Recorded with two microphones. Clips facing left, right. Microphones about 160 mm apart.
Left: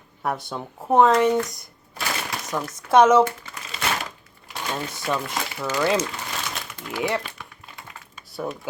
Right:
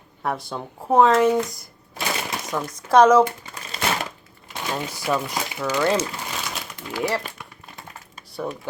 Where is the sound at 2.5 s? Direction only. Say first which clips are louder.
Even; centre (ahead or behind).